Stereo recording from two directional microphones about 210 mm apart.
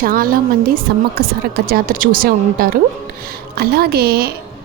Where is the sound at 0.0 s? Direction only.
45° right (ahead or behind).